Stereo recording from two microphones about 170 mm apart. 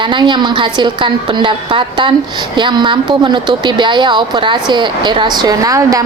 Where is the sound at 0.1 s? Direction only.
25° right (ahead or behind).